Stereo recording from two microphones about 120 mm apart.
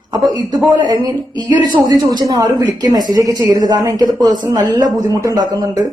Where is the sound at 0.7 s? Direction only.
35° right (ahead or behind).